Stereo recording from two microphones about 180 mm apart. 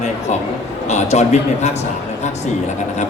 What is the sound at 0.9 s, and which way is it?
Speech, 40° left (ahead or behind).